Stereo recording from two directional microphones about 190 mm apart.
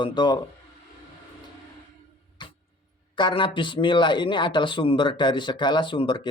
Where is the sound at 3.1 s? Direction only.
25° left (ahead or behind).